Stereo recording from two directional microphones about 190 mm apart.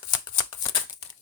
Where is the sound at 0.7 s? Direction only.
20° left (ahead or behind).